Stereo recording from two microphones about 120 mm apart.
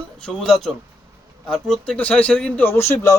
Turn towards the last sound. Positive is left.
turn(degrees=25)  # may be behind; listen again after turning